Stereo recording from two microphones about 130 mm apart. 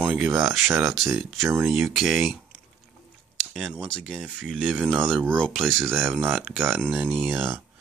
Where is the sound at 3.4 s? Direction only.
Centre (ahead or behind).